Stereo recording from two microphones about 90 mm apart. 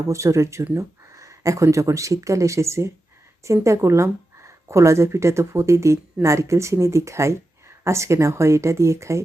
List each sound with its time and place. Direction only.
0.1 s speech: 35° right (ahead or behind)